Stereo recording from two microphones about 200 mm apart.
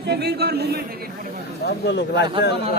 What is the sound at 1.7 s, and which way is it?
Speech, 60° left (ahead or behind).